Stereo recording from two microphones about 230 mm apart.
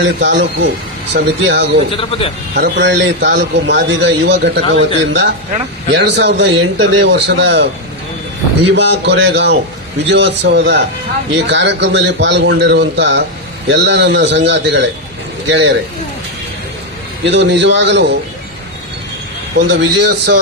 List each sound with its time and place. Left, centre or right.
0.0 s a man's voice: right
2.0 s a man's voice: left
2.6 s a man's voice: right
5.9 s a man's voice: right
8.7 s a man's voice: right
17.2 s a man's voice: right
19.6 s a man's voice: right